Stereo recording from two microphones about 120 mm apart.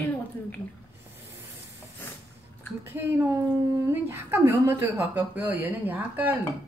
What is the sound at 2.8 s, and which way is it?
A woman's voice, 15° right (ahead or behind).